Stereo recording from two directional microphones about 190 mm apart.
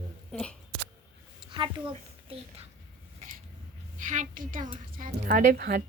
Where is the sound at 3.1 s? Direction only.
45° right (ahead or behind).